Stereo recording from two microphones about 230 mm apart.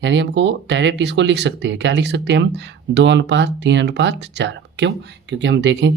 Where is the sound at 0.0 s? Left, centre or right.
Right.